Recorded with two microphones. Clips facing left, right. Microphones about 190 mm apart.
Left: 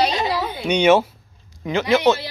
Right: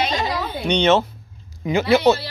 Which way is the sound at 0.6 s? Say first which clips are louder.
Left 2 dB; 10° left (ahead or behind).